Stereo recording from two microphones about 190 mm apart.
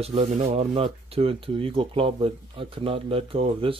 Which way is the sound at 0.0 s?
35° right (ahead or behind).